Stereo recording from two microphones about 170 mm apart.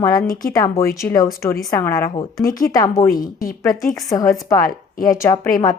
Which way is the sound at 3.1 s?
55° left (ahead or behind).